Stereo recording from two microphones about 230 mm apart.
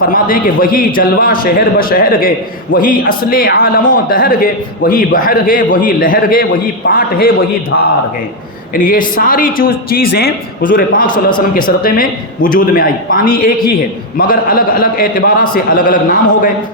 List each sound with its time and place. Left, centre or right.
0.0 s a man's voice: left
8.7 s a man's voice: left
11.0 s a man's voice: centre
11.3 s a man's voice: left